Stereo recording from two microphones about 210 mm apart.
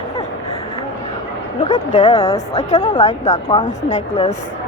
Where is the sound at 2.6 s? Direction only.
35° left (ahead or behind).